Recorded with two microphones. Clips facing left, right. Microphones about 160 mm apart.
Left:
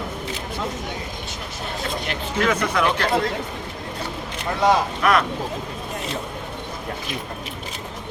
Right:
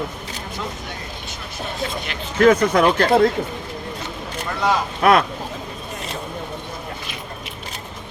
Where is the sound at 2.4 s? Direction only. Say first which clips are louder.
Right 7 dB; 45° right (ahead or behind).